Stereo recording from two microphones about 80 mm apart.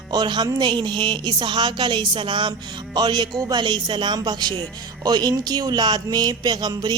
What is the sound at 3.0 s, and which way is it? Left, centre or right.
Speech, right.